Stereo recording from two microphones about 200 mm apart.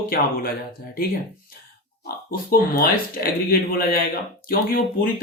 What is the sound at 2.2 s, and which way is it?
Speech, 45° left (ahead or behind).